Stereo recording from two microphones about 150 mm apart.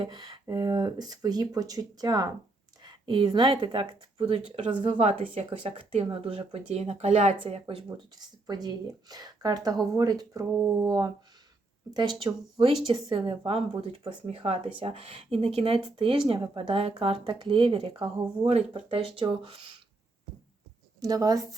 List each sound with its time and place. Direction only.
0.0 s speech: 30° right (ahead or behind); by 7.3 s 45° right (ahead or behind)
7.3 s speech: 35° right (ahead or behind)
21.0 s speech: 25° right (ahead or behind)